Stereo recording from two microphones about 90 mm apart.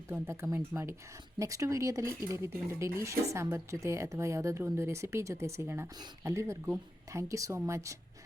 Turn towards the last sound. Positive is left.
turn(degrees=-35)  # may be behind; listen again after turning